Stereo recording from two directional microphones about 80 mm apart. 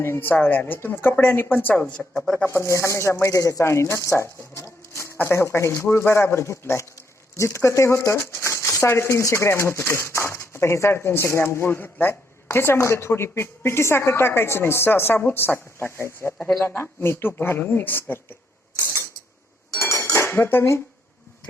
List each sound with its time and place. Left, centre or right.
0.0 s a woman's voice: left; by 2.4 s centre
2.5 s speech: left
16.4 s speech: centre
16.6 s a woman's voice: left
19.7 s cutlery: left